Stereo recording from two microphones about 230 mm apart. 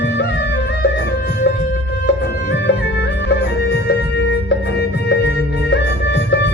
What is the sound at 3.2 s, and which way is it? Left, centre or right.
Music, left.